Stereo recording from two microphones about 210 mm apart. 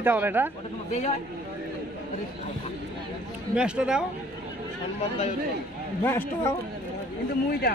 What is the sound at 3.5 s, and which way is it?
Speech, 5° right (ahead or behind).